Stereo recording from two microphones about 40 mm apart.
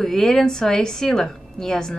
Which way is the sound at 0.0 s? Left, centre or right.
Centre.